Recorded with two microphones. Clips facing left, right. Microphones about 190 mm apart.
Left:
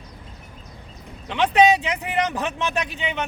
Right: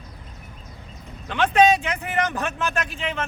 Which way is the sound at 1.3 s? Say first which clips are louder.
Left 1 dB; 15° left (ahead or behind).